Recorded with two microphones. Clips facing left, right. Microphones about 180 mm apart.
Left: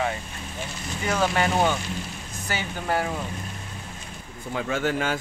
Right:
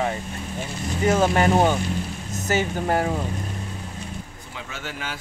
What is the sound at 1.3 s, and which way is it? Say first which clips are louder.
Speech: right 4 dB; 40° right (ahead or behind).